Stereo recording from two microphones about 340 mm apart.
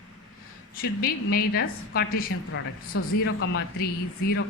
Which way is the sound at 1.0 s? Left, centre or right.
Left.